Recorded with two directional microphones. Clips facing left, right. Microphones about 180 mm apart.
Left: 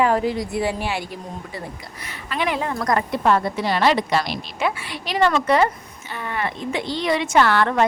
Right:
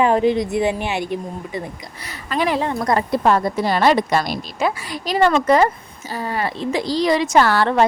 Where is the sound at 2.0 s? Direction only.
40° right (ahead or behind).